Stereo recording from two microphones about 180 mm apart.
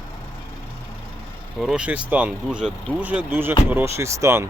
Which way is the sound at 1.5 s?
5° right (ahead or behind).